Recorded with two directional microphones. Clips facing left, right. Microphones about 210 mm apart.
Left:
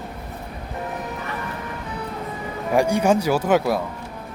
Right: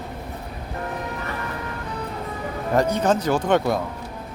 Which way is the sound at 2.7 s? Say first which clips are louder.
Left 2 dB; 10° left (ahead or behind).